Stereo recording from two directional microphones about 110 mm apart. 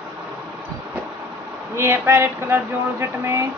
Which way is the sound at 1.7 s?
25° right (ahead or behind).